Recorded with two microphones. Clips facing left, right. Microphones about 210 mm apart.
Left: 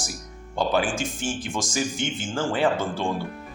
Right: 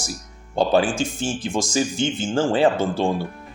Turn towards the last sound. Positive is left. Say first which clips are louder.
# right 5 dB
turn(degrees=-30)  # may be behind; listen again after turning